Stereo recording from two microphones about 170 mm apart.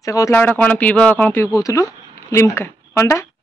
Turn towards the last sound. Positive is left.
turn(degrees=15)  # may be behind; listen again after turning